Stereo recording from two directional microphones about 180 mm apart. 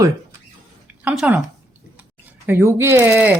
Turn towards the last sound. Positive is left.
turn(degrees=-10)  # may be behind; listen again after turning